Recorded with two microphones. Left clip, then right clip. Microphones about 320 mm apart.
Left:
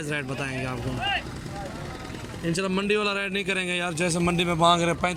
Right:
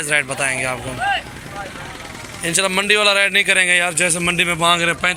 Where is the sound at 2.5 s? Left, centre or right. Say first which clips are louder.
Right 9 dB; centre.